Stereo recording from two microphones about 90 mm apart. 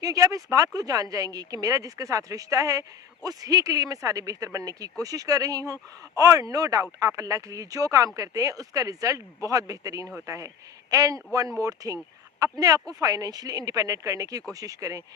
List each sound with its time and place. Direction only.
0.0 s speech: 40° right (ahead or behind)